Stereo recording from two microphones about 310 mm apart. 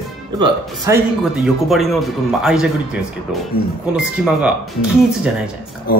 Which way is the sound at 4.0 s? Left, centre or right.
Centre.